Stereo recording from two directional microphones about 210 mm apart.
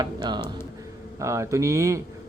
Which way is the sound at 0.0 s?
20° right (ahead or behind).